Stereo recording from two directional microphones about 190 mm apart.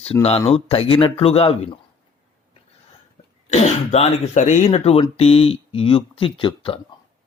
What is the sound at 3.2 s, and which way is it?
Cough, 35° left (ahead or behind).